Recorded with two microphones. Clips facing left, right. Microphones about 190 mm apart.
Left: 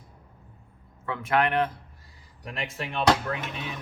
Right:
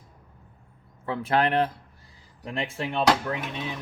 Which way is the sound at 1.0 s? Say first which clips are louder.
Right 1 dB; 30° right (ahead or behind).